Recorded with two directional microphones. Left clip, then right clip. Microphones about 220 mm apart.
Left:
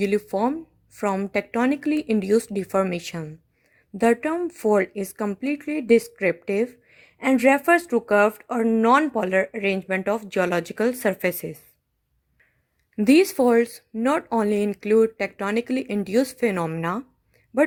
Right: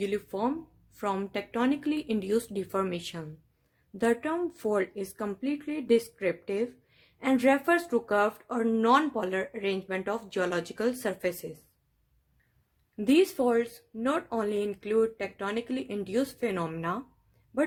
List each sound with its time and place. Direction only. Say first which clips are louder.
0.0 s speech: left 8 dB; 30° left (ahead or behind)
13.0 s speech: left 7 dB; 35° left (ahead or behind)